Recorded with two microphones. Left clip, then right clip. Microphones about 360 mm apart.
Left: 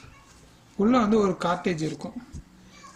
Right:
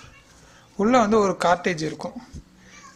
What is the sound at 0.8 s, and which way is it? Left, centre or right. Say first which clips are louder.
Speech: right 4 dB; centre.